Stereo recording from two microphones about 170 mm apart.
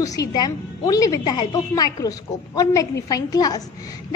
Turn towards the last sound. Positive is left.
turn(degrees=20)  # may be behind; listen again after turning